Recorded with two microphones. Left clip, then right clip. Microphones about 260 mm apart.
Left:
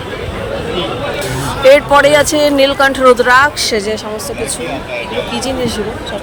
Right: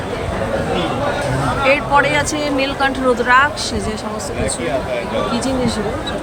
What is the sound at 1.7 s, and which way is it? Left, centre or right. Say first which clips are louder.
Speech: left 7 dB; centre.